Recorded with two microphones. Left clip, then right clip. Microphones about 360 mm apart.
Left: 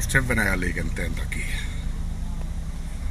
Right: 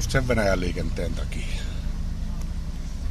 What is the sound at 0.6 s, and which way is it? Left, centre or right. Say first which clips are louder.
Speech: left 1 dB; right.